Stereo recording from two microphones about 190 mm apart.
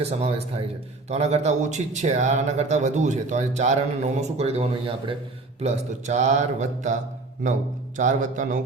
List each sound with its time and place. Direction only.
0.0 s speech: 35° right (ahead or behind)
7.9 s speech: 40° right (ahead or behind)